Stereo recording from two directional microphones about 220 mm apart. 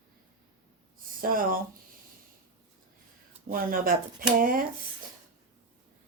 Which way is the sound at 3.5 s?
40° right (ahead or behind).